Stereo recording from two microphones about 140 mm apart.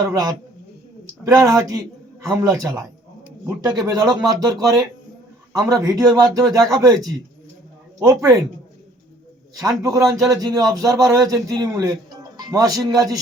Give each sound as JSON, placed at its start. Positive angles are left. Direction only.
{"t": 0.0, "sound": "a man's voice", "side_deg": -25}
{"t": 9.6, "sound": "a man's voice", "side_deg": -25}